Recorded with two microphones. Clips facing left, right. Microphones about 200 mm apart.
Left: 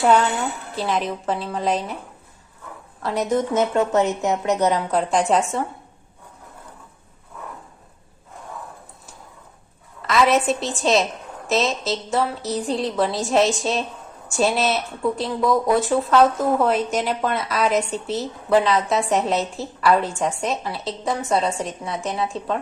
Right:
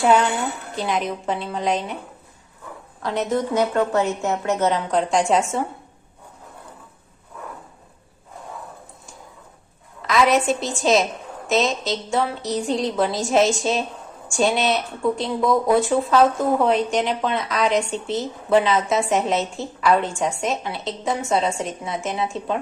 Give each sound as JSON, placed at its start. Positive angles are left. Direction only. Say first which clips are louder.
{"t": 0.0, "sound": "speech", "louder": "even", "side_deg": 0}
{"t": 3.0, "sound": "speech", "louder": "left 1 dB", "side_deg": 5}
{"t": 3.3, "sound": "a woman's voice", "louder": "left 1 dB", "side_deg": 20}
{"t": 10.0, "sound": "speech", "louder": "even", "side_deg": 0}